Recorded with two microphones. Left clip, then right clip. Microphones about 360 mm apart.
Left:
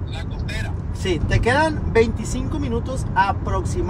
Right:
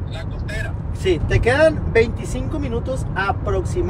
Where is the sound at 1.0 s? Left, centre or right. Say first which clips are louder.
Right 3 dB; centre.